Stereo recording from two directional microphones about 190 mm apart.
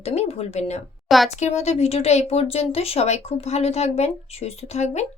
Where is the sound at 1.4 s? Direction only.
35° left (ahead or behind).